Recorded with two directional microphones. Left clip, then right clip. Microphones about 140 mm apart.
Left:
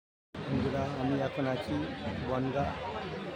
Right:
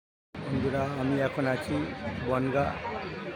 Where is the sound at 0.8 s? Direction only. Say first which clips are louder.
Right 6 dB; 20° right (ahead or behind).